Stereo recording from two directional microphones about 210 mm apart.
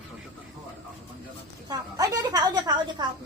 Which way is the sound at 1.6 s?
20° right (ahead or behind).